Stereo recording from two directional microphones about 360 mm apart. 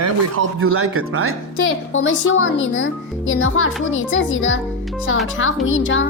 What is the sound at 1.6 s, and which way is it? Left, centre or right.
A child's voice, left.